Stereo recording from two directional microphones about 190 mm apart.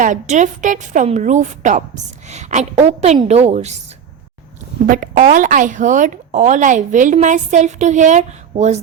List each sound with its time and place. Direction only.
0.0 s a woman's voice: 40° right (ahead or behind)
4.9 s a woman's voice: 45° right (ahead or behind)